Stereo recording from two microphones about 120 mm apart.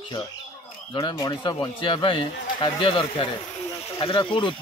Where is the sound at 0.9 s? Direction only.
30° left (ahead or behind).